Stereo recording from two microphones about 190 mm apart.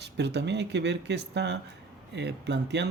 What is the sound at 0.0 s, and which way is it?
Speech, 60° right (ahead or behind).